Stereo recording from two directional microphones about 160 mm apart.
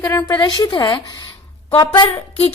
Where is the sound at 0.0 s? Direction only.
15° left (ahead or behind).